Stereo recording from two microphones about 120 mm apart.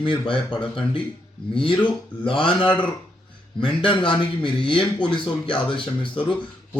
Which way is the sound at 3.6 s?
45° left (ahead or behind).